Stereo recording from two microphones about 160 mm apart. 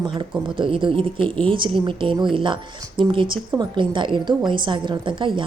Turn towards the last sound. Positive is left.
turn(degrees=-30)  # may be behind; listen again after turning